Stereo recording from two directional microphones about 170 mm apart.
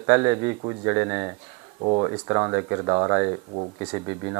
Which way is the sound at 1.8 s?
30° right (ahead or behind).